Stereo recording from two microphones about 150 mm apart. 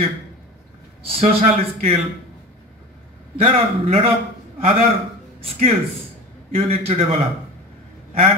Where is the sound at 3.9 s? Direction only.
40° right (ahead or behind).